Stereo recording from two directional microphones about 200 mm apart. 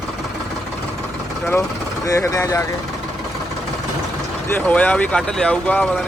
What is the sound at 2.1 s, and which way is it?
Speech, 15° left (ahead or behind).